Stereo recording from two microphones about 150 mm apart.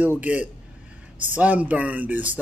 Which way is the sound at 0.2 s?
10° right (ahead or behind).